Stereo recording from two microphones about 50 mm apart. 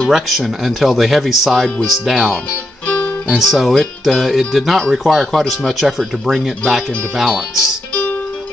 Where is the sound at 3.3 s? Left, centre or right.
Centre.